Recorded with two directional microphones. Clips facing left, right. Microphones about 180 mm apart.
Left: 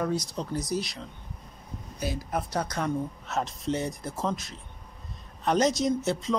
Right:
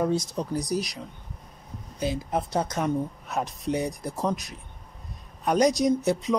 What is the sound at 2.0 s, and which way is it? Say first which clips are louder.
A woman's voice: right 4 dB; 25° right (ahead or behind).